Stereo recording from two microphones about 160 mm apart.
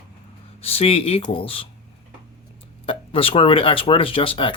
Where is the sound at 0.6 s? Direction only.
35° left (ahead or behind).